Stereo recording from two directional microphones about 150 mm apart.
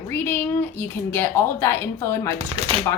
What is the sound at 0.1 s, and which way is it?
Speech, 15° left (ahead or behind).